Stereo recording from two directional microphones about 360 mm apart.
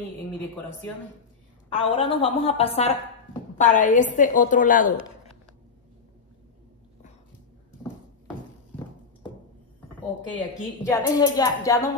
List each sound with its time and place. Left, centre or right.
1.7 s a woman's voice: centre
10.9 s a woman's voice: centre